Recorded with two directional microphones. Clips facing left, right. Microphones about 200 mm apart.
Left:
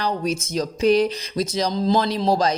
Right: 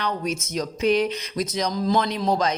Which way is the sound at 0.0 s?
30° left (ahead or behind).